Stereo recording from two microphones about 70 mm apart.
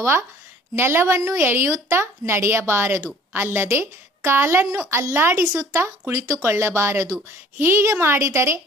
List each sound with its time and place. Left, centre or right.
0.0 s a woman's voice: right
5.7 s speech: right
6.4 s a woman's voice: right